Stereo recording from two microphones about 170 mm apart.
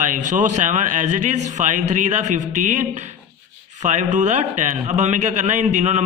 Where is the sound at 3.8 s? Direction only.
45° right (ahead or behind).